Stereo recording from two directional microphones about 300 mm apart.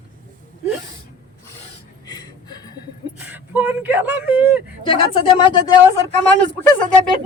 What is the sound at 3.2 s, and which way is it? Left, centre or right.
Speech, centre.